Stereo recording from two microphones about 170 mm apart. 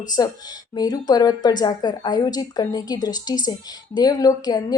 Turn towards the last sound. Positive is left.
turn(degrees=20)  # may be behind; listen again after turning